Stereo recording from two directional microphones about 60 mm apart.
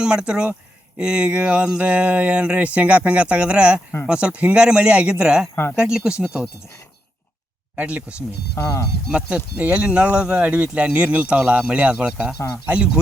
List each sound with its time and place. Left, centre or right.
0.0 s speech: centre
7.8 s speech: right
8.6 s speech: left
9.0 s speech: right